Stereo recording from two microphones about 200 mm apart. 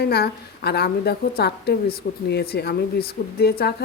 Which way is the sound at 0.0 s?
55° left (ahead or behind).